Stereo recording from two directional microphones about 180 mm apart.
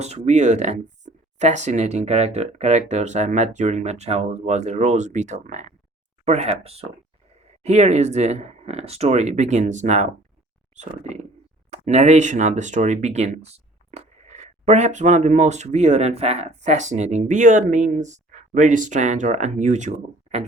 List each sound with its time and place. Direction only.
0.0 s speech: 35° right (ahead or behind)